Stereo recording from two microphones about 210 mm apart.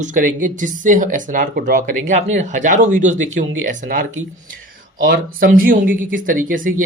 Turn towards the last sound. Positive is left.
turn(degrees=-40)  # may be behind; listen again after turning